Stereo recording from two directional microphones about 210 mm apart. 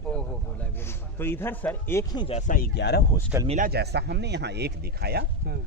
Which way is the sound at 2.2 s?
30° left (ahead or behind).